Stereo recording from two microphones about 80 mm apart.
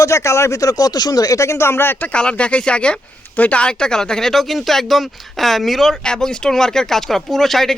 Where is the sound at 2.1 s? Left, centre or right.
Centre.